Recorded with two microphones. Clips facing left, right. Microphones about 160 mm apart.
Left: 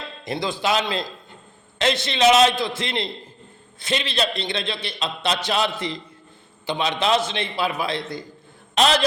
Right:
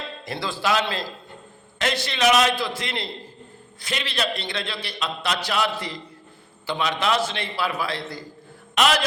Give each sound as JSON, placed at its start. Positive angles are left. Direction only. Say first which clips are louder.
{"t": 0.3, "sound": "a man's voice", "louder": "left 2 dB", "side_deg": 20}